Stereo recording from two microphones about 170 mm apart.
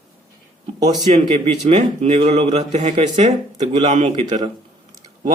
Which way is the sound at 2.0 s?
40° right (ahead or behind).